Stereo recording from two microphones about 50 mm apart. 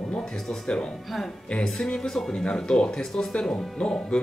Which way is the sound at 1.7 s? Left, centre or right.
Centre.